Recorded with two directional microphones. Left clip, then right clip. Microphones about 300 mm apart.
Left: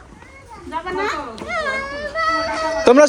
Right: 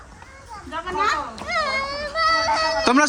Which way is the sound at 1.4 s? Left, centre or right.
Centre.